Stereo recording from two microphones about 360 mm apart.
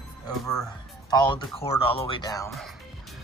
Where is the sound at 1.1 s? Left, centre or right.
Centre.